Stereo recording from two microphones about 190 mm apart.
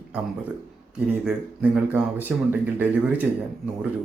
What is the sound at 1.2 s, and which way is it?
Speech, 10° right (ahead or behind).